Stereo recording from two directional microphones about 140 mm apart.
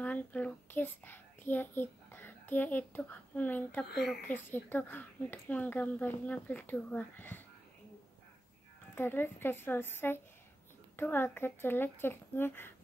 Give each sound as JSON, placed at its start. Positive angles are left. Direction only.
{"t": 0.0, "sound": "a child's voice", "side_deg": 10}
{"t": 8.9, "sound": "speech", "side_deg": 15}